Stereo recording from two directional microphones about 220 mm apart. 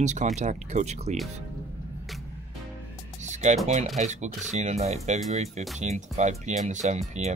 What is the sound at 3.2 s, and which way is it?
Music, 30° right (ahead or behind).